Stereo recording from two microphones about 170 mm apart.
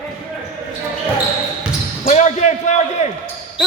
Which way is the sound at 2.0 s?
45° left (ahead or behind).